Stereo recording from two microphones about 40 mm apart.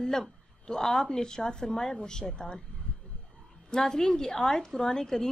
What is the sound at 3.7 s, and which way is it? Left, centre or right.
A woman's voice, centre.